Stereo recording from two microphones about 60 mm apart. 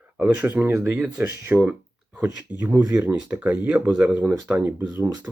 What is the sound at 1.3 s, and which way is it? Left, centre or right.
Speech, right.